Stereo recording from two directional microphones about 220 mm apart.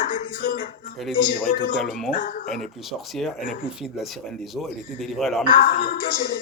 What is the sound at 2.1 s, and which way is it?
Speech, 35° left (ahead or behind).